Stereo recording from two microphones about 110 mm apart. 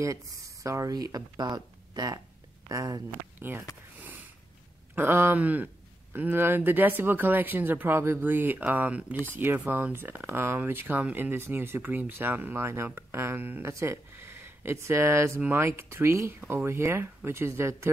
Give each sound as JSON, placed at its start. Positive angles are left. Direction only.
{"t": 0.0, "sound": "speech", "side_deg": -30}
{"t": 3.3, "sound": "speech", "side_deg": -20}
{"t": 4.0, "sound": "a sound", "side_deg": -15}
{"t": 4.9, "sound": "speech", "side_deg": -20}